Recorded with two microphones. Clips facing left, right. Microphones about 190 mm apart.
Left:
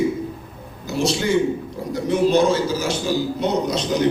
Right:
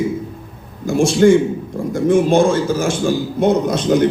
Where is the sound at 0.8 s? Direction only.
50° right (ahead or behind).